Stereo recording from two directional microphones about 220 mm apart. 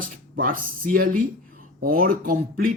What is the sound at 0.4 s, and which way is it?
Speech, 40° right (ahead or behind).